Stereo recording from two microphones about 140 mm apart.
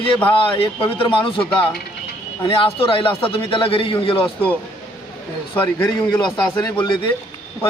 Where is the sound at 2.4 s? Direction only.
40° left (ahead or behind).